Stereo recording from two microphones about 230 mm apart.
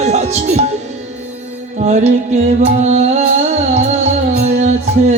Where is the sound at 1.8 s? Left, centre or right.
Right.